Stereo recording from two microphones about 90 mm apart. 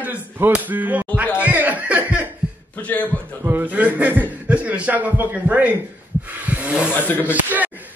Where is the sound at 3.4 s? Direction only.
20° right (ahead or behind).